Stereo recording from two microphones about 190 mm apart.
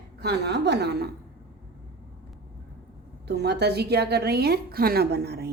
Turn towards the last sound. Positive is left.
turn(degrees=-55)  # may be behind; listen again after turning